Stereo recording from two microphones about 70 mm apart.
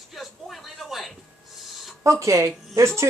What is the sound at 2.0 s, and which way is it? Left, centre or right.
Speech, right.